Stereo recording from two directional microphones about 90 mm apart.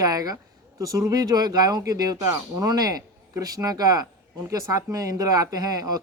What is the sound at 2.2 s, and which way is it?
Speech, 30° right (ahead or behind).